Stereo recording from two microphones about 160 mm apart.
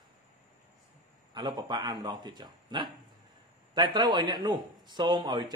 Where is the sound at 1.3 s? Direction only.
25° right (ahead or behind).